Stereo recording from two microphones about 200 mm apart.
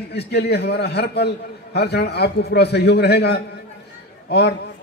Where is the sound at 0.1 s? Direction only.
55° left (ahead or behind).